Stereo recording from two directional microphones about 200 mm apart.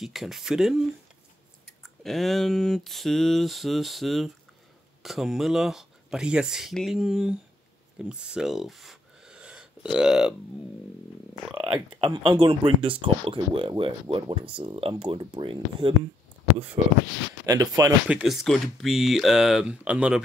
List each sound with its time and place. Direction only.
0.0 s speech: centre (ahead or behind)
11.5 s speech: 5° right (ahead or behind)
12.0 s speech: 25° right (ahead or behind)
17.5 s speech: 15° right (ahead or behind)
18.0 s speech: 5° right (ahead or behind)